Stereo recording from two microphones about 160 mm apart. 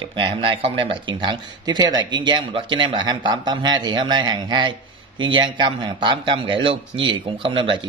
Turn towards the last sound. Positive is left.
turn(degrees=-30)  # may be behind; listen again after turning